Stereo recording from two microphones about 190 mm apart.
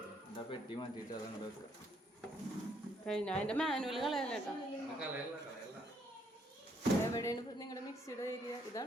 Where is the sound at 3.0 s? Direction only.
5° left (ahead or behind).